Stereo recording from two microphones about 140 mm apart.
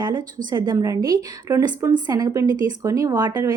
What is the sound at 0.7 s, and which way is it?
Speech, 20° right (ahead or behind).